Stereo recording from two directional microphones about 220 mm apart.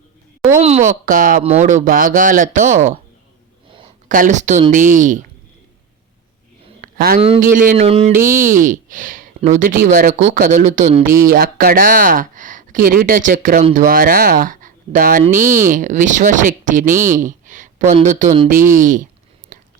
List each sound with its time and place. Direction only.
0.6 s speech: 30° right (ahead or behind)
4.1 s speech: 35° right (ahead or behind)
6.8 s a sound: 40° right (ahead or behind)
7.2 s a man's voice: 25° right (ahead or behind)
7.4 s speech: 40° right (ahead or behind)
7.9 s speech: 25° right (ahead or behind)